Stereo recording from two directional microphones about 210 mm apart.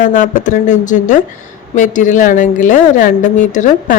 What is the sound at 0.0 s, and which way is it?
A woman's voice, 40° left (ahead or behind).